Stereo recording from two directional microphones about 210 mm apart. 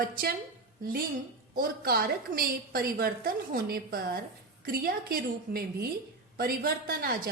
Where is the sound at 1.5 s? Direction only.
45° right (ahead or behind).